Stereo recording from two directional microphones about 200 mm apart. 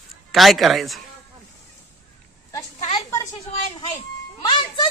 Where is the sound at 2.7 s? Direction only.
30° left (ahead or behind).